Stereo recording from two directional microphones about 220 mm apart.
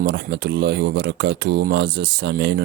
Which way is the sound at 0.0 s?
50° right (ahead or behind).